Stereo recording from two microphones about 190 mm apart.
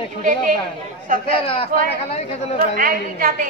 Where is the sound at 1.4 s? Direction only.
30° left (ahead or behind).